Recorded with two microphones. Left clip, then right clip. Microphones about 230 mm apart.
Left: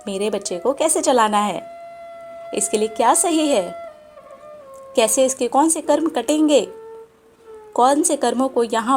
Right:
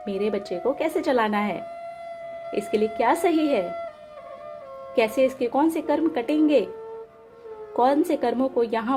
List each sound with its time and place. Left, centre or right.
0.0 s speech: left
3.6 s speech: centre
4.9 s speech: centre
7.8 s speech: centre